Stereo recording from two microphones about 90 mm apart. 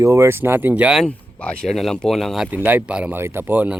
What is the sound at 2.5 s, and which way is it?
Speech, 20° right (ahead or behind).